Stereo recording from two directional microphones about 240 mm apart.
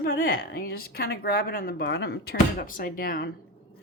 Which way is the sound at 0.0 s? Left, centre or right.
Left.